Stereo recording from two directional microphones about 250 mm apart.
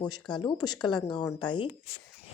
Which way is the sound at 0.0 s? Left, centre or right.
Centre.